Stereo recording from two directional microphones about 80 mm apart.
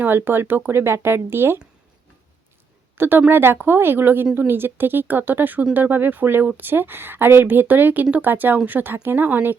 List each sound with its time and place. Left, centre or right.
0.0 s speech: right
3.0 s speech: right